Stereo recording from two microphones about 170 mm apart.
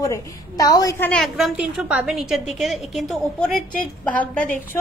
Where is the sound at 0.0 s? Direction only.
20° left (ahead or behind).